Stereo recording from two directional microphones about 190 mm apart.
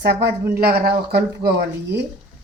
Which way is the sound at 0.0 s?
60° right (ahead or behind).